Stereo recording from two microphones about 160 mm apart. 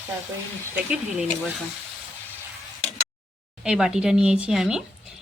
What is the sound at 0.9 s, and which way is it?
Speech, 5° right (ahead or behind).